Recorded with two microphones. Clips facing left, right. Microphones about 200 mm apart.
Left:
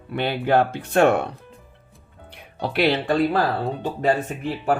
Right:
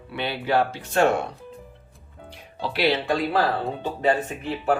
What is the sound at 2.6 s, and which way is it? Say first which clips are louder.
Speech: left 2 dB; 55° left (ahead or behind).